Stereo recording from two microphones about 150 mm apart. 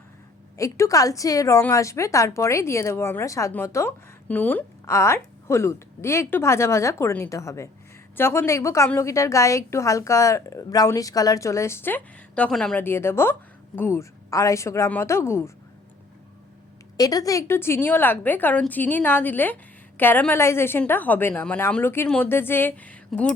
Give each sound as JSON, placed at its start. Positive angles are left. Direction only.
{"t": 0.5, "sound": "a woman's voice", "side_deg": 20}
{"t": 12.8, "sound": "a woman's voice", "side_deg": 15}
{"t": 17.0, "sound": "a woman's voice", "side_deg": 25}